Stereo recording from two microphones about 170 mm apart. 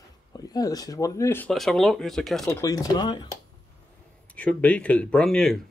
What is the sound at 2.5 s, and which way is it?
Speech, 20° left (ahead or behind).